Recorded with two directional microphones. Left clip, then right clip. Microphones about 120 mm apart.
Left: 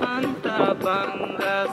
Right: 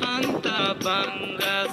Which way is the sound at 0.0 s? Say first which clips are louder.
Even; 45° right (ahead or behind).